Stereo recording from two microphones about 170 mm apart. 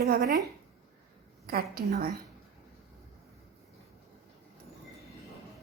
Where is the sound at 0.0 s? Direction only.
70° right (ahead or behind).